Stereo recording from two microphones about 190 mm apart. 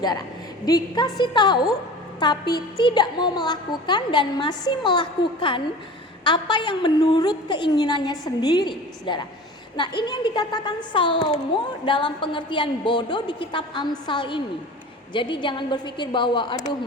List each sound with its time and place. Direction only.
0.6 s a woman's voice: 20° left (ahead or behind)